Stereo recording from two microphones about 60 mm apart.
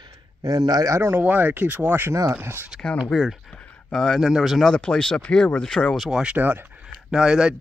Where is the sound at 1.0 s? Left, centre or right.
Right.